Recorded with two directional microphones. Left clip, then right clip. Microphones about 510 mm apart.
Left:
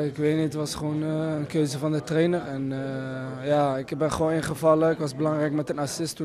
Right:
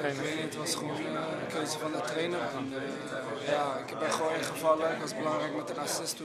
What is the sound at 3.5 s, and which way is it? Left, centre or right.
A man's voice, left.